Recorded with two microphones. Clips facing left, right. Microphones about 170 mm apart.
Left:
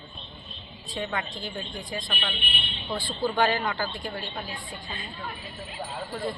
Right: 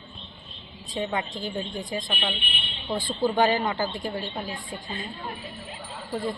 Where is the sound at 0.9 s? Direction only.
20° right (ahead or behind).